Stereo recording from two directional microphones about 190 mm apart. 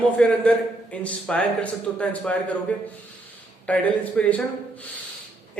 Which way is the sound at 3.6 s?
5° left (ahead or behind).